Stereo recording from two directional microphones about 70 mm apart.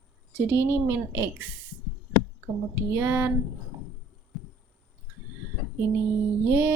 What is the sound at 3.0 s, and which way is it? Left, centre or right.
Speech, right.